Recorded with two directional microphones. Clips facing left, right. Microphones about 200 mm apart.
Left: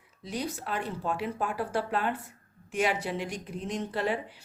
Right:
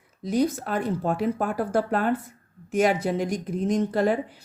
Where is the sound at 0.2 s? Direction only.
45° right (ahead or behind).